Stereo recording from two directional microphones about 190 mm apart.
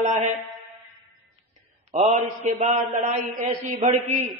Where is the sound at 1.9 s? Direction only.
35° right (ahead or behind).